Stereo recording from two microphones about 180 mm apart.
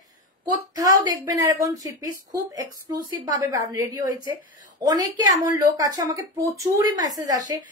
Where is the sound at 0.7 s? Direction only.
20° right (ahead or behind).